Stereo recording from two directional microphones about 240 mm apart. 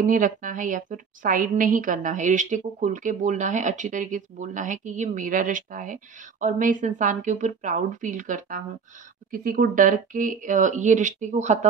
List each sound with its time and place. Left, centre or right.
0.0 s a woman's voice: right